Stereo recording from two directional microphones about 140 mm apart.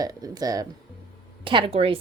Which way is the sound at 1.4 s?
35° right (ahead or behind).